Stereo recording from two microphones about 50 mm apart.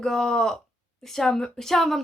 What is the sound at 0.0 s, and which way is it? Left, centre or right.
Speech, centre.